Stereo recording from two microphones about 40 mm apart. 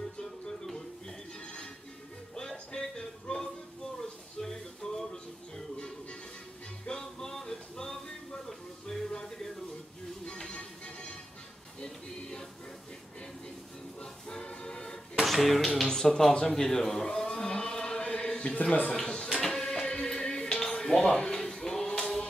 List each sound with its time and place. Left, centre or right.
2.7 s music: centre
4.4 s a sound: centre
6.9 s music: centre
14.3 s music: centre
15.2 s speech: centre
15.9 s a man's voice: centre
17.5 s chant: left
18.4 s a man's voice: left
18.9 s a sound: centre
19.6 s music: centre